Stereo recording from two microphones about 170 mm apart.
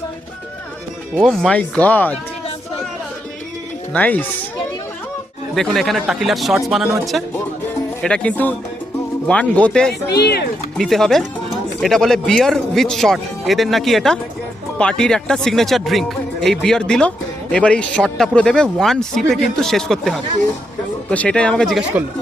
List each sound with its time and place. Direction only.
1.2 s speech: centre (ahead or behind)
3.9 s speech: 10° left (ahead or behind)
5.5 s speech: centre (ahead or behind)
10.1 s speech: 75° left (ahead or behind)
10.8 s speech: centre (ahead or behind)